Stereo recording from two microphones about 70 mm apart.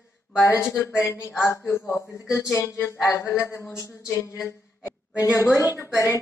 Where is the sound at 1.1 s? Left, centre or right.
Left.